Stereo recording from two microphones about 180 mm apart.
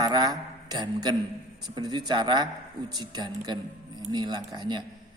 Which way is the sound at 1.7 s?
20° right (ahead or behind).